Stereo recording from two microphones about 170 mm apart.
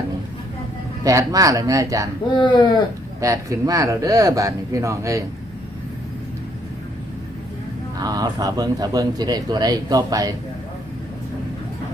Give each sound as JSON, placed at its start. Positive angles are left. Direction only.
{"t": 1.0, "sound": "speech", "side_deg": -20}
{"t": 2.3, "sound": "speech", "side_deg": 25}
{"t": 3.2, "sound": "speech", "side_deg": -20}
{"t": 7.9, "sound": "speech", "side_deg": -20}